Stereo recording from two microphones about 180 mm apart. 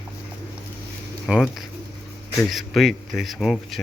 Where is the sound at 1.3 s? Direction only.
Centre (ahead or behind).